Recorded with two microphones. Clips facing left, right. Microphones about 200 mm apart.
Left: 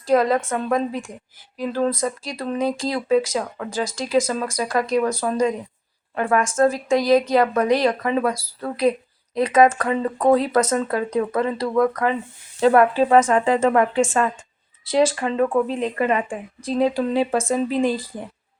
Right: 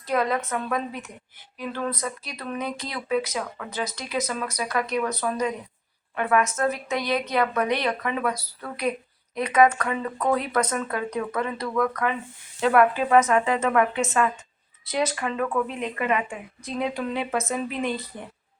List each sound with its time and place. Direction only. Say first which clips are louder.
0.1 s speech: left 7 dB; 30° left (ahead or behind)
0.3 s speech: left 5 dB; 50° left (ahead or behind)
0.7 s speech: left 7 dB; 30° left (ahead or behind)